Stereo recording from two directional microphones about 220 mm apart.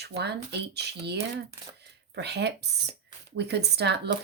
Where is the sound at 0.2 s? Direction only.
50° right (ahead or behind).